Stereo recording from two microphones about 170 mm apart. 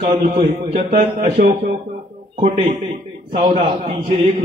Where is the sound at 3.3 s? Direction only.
55° right (ahead or behind).